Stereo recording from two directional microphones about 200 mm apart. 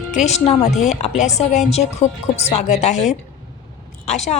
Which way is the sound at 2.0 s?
15° left (ahead or behind).